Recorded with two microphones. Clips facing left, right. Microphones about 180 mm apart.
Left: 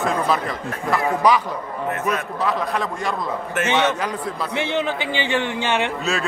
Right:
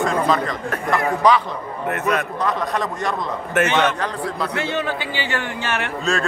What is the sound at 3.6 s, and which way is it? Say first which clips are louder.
A man's voice: left 2 dB; 10° left (ahead or behind).